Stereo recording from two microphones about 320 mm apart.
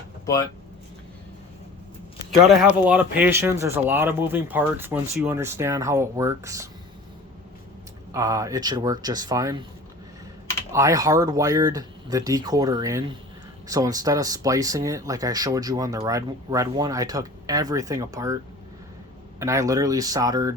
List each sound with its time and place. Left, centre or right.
2.8 s speech: centre
8.1 s speech: centre
10.7 s speech: centre
19.4 s speech: centre